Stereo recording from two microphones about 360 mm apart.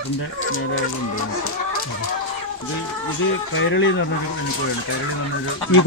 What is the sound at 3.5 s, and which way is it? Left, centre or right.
Speech, left.